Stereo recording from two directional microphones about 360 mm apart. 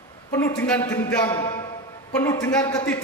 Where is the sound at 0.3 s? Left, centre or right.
Centre.